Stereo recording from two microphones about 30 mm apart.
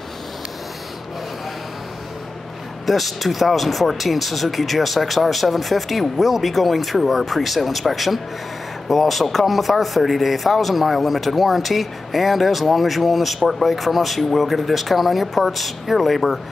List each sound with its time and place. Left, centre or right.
2.9 s a man's voice: centre